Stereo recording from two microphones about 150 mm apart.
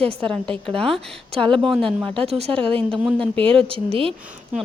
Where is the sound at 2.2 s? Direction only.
45° right (ahead or behind).